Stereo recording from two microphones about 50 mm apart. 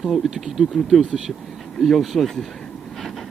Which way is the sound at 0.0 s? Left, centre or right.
Centre.